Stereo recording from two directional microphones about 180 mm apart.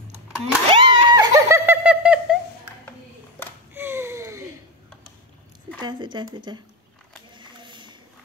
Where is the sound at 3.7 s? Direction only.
15° right (ahead or behind).